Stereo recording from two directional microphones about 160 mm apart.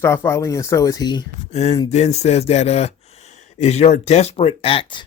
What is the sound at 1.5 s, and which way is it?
Speech, 45° left (ahead or behind).